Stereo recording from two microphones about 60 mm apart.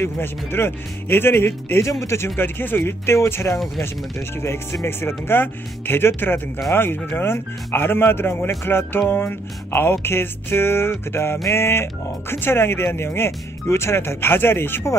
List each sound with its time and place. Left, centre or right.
0.0 s speech: left
1.9 s speech: left